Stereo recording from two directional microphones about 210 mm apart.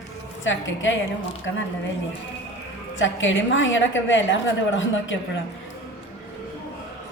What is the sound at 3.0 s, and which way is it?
A woman's voice, 65° left (ahead or behind).